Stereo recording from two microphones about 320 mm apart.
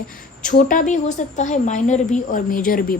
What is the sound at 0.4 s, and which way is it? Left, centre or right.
A woman's voice, left.